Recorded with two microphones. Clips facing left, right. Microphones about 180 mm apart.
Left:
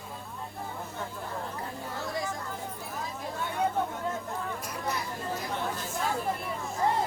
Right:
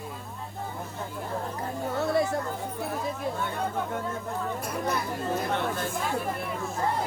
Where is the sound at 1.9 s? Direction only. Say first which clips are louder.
Right 9 dB; 65° right (ahead or behind).